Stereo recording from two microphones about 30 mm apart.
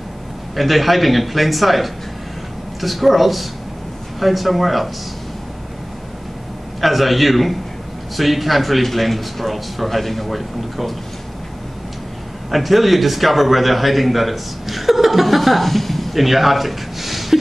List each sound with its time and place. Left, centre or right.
0.6 s a man's voice: centre
6.8 s a man's voice: centre
12.4 s a man's voice: centre